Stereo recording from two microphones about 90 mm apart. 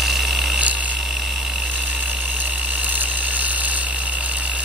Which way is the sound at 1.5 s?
15° right (ahead or behind).